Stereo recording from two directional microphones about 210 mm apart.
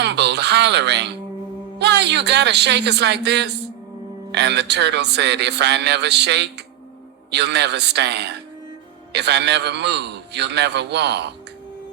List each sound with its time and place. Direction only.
0.0 s music: 55° right (ahead or behind)
1.8 s a man's voice: 55° right (ahead or behind)